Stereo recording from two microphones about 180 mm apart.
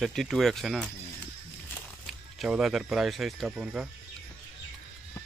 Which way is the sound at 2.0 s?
Centre (ahead or behind).